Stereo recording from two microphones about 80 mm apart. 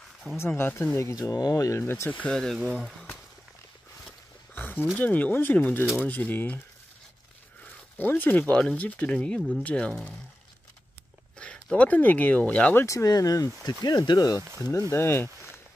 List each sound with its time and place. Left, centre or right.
0.4 s speech: left
1.3 s speech: left
2.0 s speech: centre
2.3 s speech: centre
4.6 s a sound: left
4.9 s speech: centre
8.0 s speech: left
8.5 s speech: centre
11.3 s speech: centre
12.7 s speech: left
14.6 s speech: left